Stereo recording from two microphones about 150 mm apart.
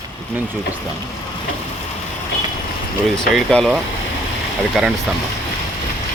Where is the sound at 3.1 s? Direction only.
5° left (ahead or behind).